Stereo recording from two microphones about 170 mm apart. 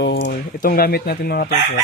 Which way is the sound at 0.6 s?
60° left (ahead or behind).